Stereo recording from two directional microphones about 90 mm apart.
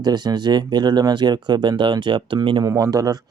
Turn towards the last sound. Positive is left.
turn(degrees=-40)  # may be behind; listen again after turning